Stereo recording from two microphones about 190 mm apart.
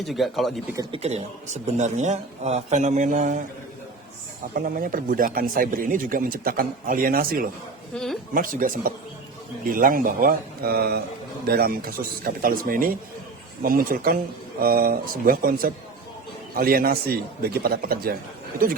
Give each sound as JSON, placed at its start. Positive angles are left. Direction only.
{"t": 0.0, "sound": "speech", "side_deg": 0}
{"t": 0.8, "sound": "a man's voice", "side_deg": -30}
{"t": 4.5, "sound": "speech", "side_deg": -45}
{"t": 7.9, "sound": "speech", "side_deg": 0}
{"t": 8.3, "sound": "speech", "side_deg": -45}